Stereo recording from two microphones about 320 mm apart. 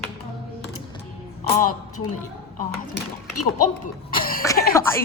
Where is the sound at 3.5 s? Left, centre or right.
Left.